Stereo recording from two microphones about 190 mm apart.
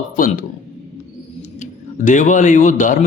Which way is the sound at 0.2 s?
45° left (ahead or behind).